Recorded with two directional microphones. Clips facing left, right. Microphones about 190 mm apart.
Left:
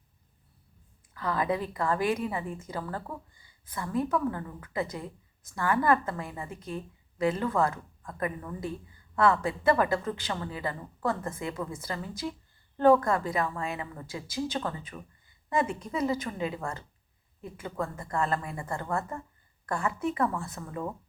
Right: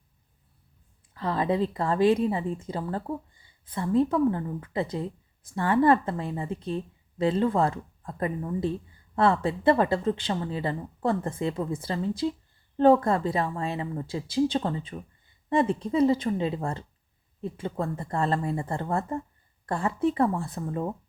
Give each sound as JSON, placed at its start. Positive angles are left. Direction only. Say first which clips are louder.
{"t": 1.1, "sound": "a woman's voice", "louder": "right 3 dB", "side_deg": -30}